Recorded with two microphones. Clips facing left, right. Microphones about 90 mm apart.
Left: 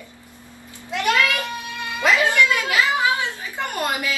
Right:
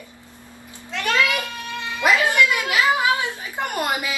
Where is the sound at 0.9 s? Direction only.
15° left (ahead or behind).